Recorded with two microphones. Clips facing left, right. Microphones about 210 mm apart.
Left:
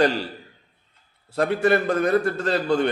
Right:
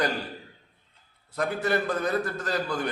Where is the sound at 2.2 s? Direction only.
30° left (ahead or behind).